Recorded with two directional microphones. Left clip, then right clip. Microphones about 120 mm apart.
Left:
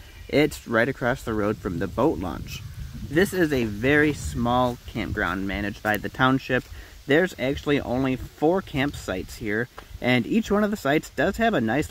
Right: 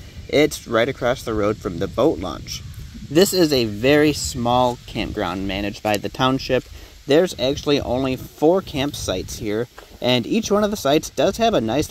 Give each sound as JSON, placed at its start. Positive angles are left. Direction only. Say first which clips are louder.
{"t": 0.3, "sound": "speech", "louder": "right 4 dB", "side_deg": -5}
{"t": 3.2, "sound": "speech", "louder": "right 6 dB", "side_deg": -40}
{"t": 6.3, "sound": "speech", "louder": "right 4 dB", "side_deg": -20}